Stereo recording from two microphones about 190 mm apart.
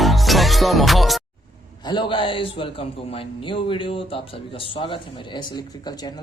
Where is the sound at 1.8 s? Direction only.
25° left (ahead or behind).